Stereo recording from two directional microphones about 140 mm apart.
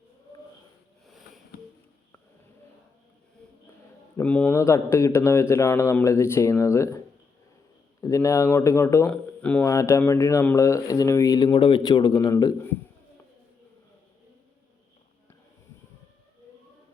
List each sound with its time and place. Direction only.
1.0 s a sound: centre (ahead or behind)
4.2 s speech: 10° left (ahead or behind)
8.0 s speech: 25° left (ahead or behind)
9.6 s speech: 20° left (ahead or behind)